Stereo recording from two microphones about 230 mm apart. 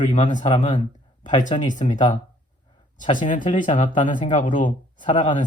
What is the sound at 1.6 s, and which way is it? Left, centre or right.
Speech, left.